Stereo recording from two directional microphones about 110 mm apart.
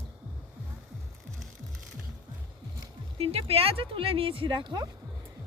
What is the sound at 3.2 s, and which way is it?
Speech, 65° right (ahead or behind).